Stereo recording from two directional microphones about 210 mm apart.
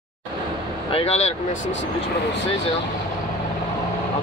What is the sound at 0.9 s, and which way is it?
Speech, 30° left (ahead or behind).